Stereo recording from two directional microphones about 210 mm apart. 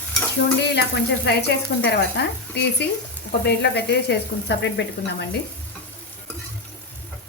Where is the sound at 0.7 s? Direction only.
55° left (ahead or behind).